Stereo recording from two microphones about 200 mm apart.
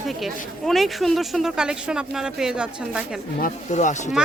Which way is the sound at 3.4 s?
40° left (ahead or behind).